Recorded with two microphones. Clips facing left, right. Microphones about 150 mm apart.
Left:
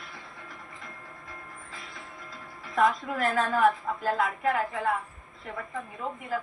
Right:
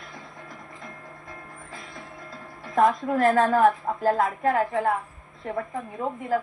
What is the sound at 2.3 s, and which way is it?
Speech, 40° right (ahead or behind).